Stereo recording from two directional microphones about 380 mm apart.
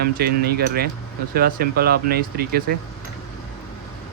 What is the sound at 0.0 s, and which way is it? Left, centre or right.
Speech, right.